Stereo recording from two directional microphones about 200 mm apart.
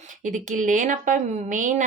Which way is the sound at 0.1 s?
40° right (ahead or behind).